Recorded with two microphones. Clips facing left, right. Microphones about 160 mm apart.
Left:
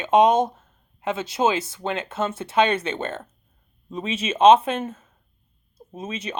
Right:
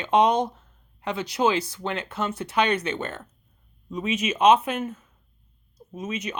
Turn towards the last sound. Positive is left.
turn(degrees=30)  # may be behind; listen again after turning